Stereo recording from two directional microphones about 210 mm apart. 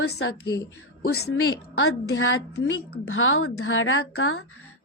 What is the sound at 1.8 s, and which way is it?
Speech, 75° left (ahead or behind).